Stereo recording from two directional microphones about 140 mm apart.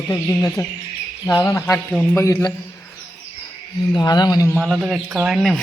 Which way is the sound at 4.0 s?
30° left (ahead or behind).